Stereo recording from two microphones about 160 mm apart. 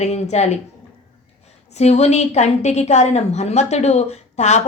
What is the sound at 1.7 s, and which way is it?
A woman's voice, 45° left (ahead or behind).